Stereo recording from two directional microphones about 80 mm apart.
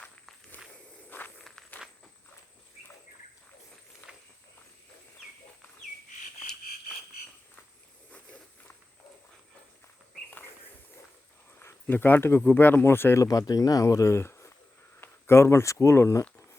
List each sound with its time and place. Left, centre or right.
1.1 s walk: left
4.1 s walk: centre
8.1 s walk: centre
11.6 s a sound: left
12.5 s speech: left
13.1 s speech: left